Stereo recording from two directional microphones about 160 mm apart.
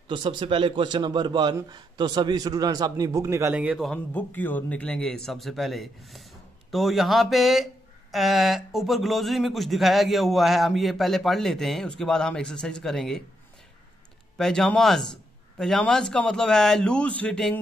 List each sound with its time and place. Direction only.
0.1 s a man's voice: 30° right (ahead or behind)
3.6 s speech: centre (ahead or behind)
14.3 s speech: 5° left (ahead or behind)